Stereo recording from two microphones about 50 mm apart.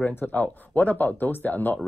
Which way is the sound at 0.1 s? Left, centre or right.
Left.